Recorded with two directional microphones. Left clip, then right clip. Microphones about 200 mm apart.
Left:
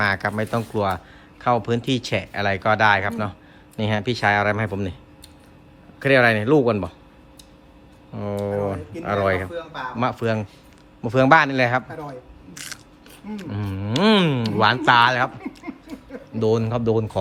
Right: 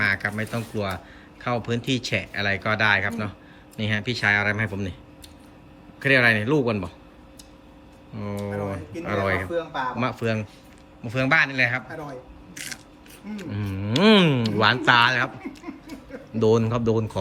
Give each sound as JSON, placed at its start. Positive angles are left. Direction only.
{"t": 0.0, "sound": "speech", "side_deg": 10}
{"t": 6.0, "sound": "speech", "side_deg": 10}
{"t": 8.1, "sound": "speech", "side_deg": 10}
{"t": 9.5, "sound": "speech", "side_deg": -30}
{"t": 9.9, "sound": "speech", "side_deg": 5}
{"t": 12.5, "sound": "a sound", "side_deg": 15}
{"t": 13.3, "sound": "speech", "side_deg": 10}
{"t": 16.4, "sound": "speech", "side_deg": 0}